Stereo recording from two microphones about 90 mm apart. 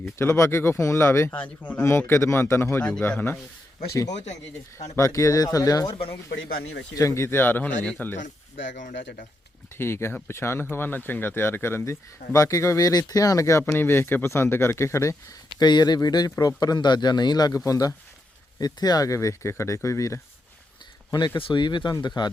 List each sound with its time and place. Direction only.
0.2 s speech: 30° left (ahead or behind)
1.3 s a man's voice: 15° left (ahead or behind)
1.8 s speech: 25° left (ahead or behind)
4.9 s speech: 35° left (ahead or behind)
5.9 s speech: 90° left
7.0 s speech: 30° left (ahead or behind)
9.7 s speech: 30° left (ahead or behind)
13.7 s speech: 25° left (ahead or behind)
15.5 s speech: 50° left (ahead or behind); by 20.2 s 35° left (ahead or behind)
21.1 s speech: 50° left (ahead or behind)
21.3 s speech: 65° left (ahead or behind); by 22.3 s 50° left (ahead or behind)